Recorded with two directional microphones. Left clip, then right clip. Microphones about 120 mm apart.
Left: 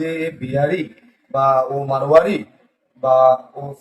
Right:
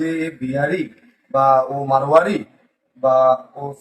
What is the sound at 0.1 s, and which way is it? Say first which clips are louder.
A man's voice: left 1 dB; 25° left (ahead or behind).